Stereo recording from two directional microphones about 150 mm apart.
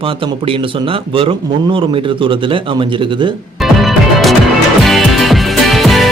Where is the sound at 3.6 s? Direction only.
Centre (ahead or behind).